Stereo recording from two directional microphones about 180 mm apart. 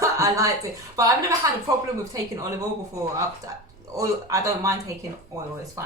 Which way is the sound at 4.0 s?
15° right (ahead or behind).